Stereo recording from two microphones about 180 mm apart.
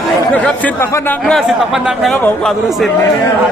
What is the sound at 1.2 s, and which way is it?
Speech, centre (ahead or behind).